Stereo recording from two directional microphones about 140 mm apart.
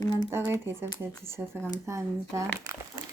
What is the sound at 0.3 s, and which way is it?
Speech, 20° right (ahead or behind).